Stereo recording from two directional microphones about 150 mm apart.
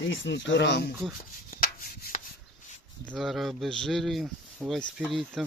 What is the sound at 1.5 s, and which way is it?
Rub, 70° left (ahead or behind).